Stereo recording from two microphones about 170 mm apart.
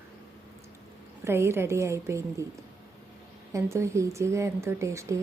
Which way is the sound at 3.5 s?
15° right (ahead or behind).